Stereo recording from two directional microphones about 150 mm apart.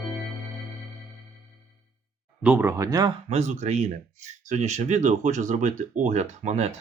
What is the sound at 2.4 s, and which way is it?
Speech, 15° right (ahead or behind).